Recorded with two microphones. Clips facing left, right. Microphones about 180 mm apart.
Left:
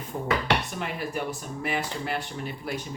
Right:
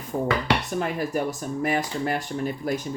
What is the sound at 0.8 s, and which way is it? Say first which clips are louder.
Speech: right 5 dB; 40° right (ahead or behind).